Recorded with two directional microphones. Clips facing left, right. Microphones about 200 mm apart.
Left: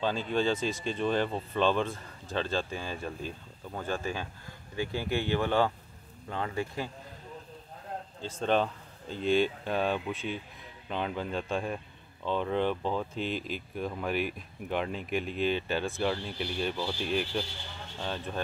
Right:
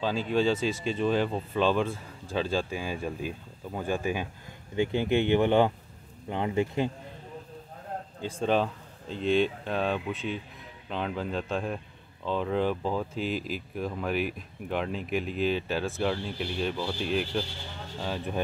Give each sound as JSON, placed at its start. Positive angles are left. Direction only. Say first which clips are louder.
{"t": 0.0, "sound": "speech", "louder": "right 3 dB", "side_deg": -5}
{"t": 8.2, "sound": "speech", "louder": "right 2 dB", "side_deg": -10}